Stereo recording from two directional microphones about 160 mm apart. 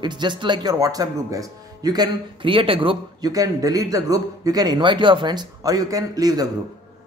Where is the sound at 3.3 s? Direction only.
20° right (ahead or behind).